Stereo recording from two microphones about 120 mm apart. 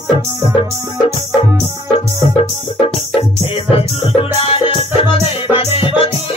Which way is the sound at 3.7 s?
55° left (ahead or behind).